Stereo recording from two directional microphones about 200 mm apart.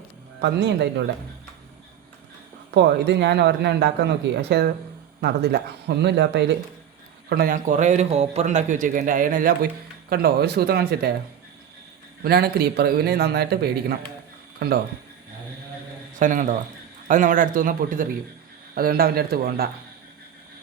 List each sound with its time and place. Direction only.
0.4 s speech: 60° right (ahead or behind)
2.7 s speech: 55° right (ahead or behind)
7.3 s a man's voice: 50° right (ahead or behind)
12.2 s a man's voice: 50° right (ahead or behind)
16.1 s a man's voice: 40° right (ahead or behind)